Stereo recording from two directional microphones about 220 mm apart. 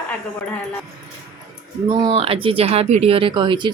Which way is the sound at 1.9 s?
25° right (ahead or behind).